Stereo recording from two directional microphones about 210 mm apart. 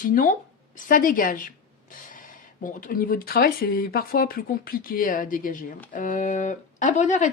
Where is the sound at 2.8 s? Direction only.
45° left (ahead or behind).